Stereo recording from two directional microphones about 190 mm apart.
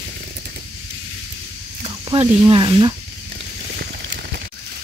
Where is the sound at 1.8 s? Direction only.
25° right (ahead or behind).